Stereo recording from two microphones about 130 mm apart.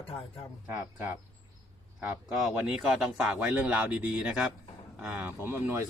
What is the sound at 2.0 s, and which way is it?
Speech, 10° right (ahead or behind).